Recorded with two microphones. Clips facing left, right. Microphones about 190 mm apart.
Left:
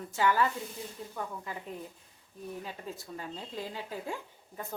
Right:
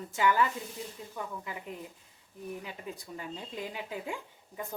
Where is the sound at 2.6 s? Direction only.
15° right (ahead or behind).